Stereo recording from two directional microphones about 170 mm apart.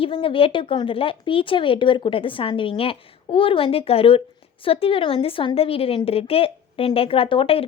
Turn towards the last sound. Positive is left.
turn(degrees=30)  # may be behind; listen again after turning